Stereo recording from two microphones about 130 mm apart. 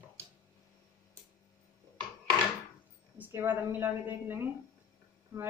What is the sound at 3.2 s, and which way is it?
A woman's voice, 15° right (ahead or behind).